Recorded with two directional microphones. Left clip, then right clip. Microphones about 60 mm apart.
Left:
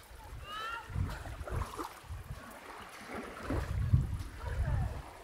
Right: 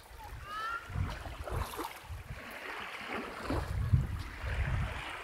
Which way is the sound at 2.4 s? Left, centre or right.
Centre.